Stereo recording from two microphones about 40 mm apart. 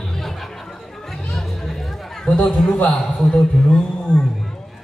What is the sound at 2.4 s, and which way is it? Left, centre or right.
Speech, centre.